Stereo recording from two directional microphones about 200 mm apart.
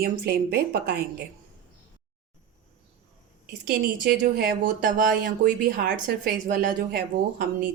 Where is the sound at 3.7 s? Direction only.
50° right (ahead or behind).